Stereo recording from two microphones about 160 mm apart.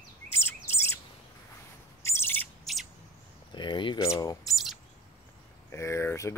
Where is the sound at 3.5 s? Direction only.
30° left (ahead or behind).